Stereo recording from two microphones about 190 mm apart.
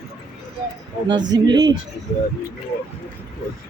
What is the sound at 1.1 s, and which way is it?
Speech, 20° right (ahead or behind).